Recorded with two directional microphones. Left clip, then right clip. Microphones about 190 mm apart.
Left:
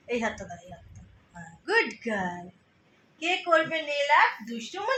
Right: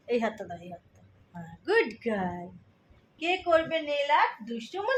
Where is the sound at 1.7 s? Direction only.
65° right (ahead or behind).